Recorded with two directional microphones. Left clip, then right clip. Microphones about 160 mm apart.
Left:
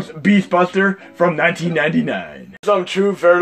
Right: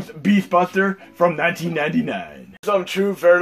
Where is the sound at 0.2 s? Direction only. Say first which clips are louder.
Left 2 dB; 45° left (ahead or behind).